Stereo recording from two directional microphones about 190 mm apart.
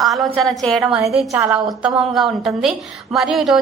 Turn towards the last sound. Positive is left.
turn(degrees=0)  # may be behind; listen again after turning